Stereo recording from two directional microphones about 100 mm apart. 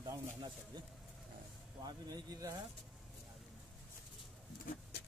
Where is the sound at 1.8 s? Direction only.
45° right (ahead or behind).